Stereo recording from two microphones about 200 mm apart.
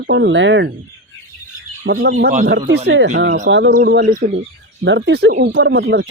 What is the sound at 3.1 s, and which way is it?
Speech, 40° right (ahead or behind).